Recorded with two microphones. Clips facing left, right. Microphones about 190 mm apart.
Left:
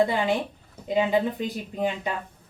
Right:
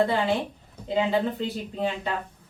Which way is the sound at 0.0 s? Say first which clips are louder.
Even; 15° left (ahead or behind).